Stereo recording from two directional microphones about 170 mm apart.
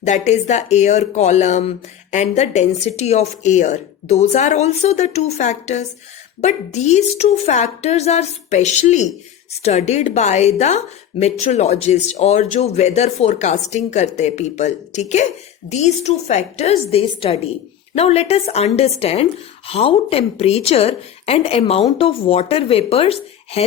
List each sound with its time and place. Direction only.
0.0 s speech: 45° left (ahead or behind)